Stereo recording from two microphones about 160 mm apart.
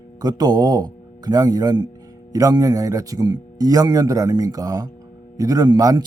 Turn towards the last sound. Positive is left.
turn(degrees=-25)  # may be behind; listen again after turning